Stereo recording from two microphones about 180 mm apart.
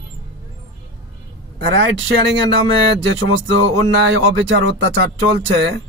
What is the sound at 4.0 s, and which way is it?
Speech, 90° right.